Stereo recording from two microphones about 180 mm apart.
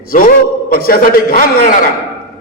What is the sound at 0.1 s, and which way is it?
A man's voice, 50° left (ahead or behind).